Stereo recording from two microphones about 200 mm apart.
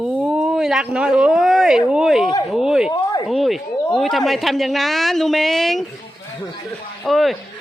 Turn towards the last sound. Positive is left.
turn(degrees=0)  # may be behind; listen again after turning